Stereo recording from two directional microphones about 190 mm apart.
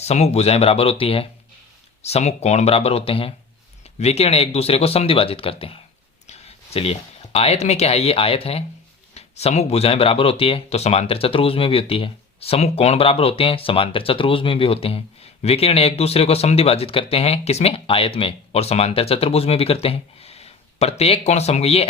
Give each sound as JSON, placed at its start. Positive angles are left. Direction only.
{"t": 0.0, "sound": "speech", "side_deg": 35}